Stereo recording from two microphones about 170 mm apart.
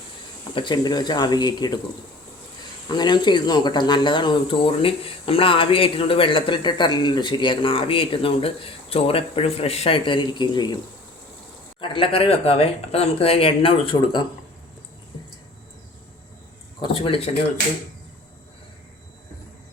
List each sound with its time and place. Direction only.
0.5 s speech: 30° left (ahead or behind)
2.9 s speech: 25° left (ahead or behind)
11.8 s speech: 30° left (ahead or behind)
16.8 s speech: 30° left (ahead or behind)